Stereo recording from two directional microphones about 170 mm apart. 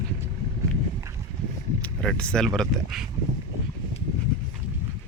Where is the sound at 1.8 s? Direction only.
5° left (ahead or behind).